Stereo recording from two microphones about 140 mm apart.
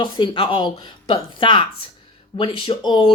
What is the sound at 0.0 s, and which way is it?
Speech, 35° left (ahead or behind).